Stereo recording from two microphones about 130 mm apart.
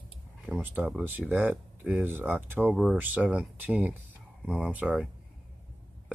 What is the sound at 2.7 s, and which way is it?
Speech, centre (ahead or behind).